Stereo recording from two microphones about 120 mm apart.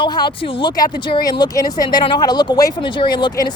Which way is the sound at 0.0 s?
40° left (ahead or behind).